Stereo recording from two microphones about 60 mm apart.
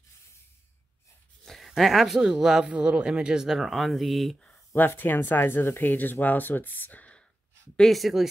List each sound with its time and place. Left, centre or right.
1.4 s a sound: centre
1.8 s speech: centre
4.7 s speech: left
7.7 s speech: centre